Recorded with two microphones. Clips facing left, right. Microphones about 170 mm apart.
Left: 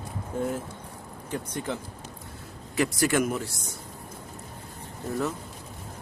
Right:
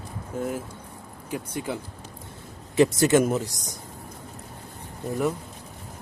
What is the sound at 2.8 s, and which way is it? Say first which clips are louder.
Speech: right 6 dB; 20° right (ahead or behind).